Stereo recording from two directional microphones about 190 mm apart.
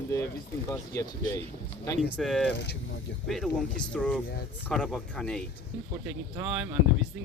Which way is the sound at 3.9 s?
5° left (ahead or behind).